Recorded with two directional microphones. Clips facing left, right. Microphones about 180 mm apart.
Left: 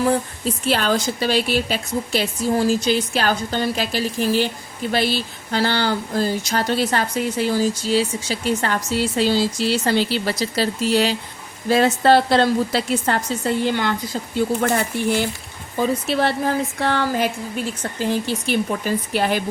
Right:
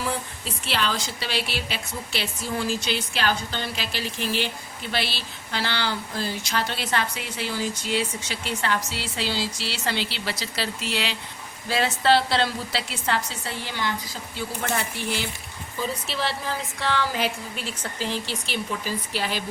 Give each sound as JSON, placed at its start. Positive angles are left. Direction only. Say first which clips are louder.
{"t": 0.0, "sound": "speech", "louder": "left 10 dB", "side_deg": 45}